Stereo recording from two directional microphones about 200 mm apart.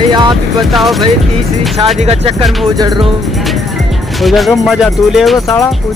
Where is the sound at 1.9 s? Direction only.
30° right (ahead or behind).